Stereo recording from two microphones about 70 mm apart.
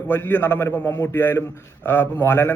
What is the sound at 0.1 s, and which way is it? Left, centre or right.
A man's voice, left.